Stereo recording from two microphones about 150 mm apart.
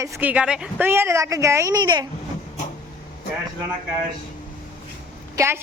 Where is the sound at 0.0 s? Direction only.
15° right (ahead or behind).